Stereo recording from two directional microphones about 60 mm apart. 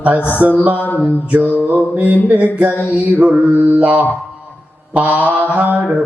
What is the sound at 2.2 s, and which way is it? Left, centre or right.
Mantra, right.